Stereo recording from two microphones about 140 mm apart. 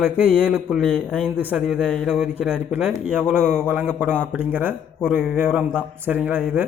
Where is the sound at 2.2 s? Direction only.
10° right (ahead or behind).